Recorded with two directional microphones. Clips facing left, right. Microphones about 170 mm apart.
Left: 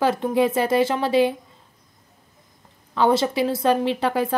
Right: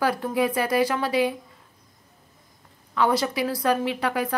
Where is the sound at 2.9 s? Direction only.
25° left (ahead or behind).